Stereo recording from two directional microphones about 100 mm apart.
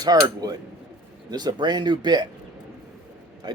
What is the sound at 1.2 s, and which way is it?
Speech, 45° right (ahead or behind).